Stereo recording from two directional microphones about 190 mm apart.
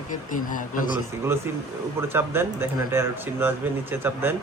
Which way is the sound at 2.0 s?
10° right (ahead or behind).